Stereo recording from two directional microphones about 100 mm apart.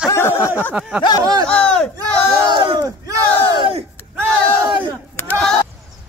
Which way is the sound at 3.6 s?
75° right (ahead or behind).